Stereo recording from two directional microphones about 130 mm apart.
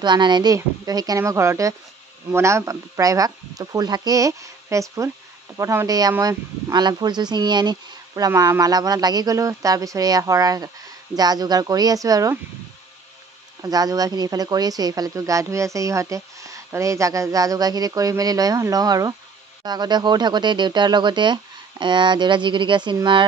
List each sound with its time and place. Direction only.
0.0 s speech: 35° right (ahead or behind)
13.6 s speech: 30° right (ahead or behind)